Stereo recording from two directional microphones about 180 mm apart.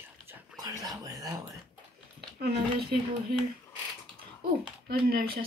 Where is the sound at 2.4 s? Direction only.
60° right (ahead or behind).